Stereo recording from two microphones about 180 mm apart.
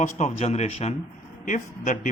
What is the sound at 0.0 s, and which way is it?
A man's voice, 40° left (ahead or behind).